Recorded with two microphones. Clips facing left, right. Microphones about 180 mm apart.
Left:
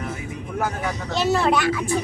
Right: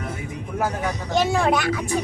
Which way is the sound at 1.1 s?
10° right (ahead or behind).